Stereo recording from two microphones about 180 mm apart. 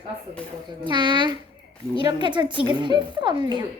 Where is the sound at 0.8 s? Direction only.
25° right (ahead or behind).